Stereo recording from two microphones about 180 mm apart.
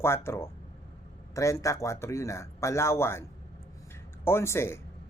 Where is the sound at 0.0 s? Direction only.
15° left (ahead or behind).